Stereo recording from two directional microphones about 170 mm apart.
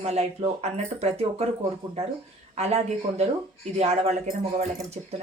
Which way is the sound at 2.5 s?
40° right (ahead or behind).